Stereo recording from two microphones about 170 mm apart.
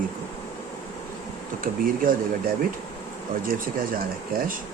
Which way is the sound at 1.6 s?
55° right (ahead or behind).